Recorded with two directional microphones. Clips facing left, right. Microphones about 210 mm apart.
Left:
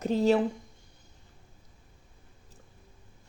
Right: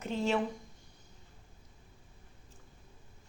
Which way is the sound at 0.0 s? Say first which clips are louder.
Left 8 dB; 35° left (ahead or behind).